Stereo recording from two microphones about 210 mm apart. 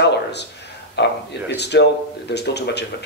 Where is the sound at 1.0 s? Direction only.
55° left (ahead or behind).